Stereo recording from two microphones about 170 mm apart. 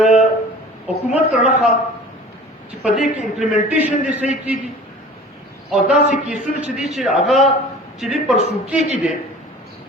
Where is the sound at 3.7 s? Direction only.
10° right (ahead or behind).